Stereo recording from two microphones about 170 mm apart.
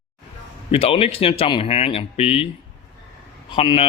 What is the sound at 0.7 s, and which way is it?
Speech, 35° left (ahead or behind).